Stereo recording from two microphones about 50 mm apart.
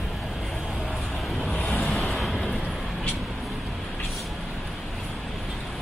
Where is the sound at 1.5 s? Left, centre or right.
Left.